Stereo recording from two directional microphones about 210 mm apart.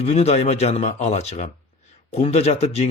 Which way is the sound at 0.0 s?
30° left (ahead or behind).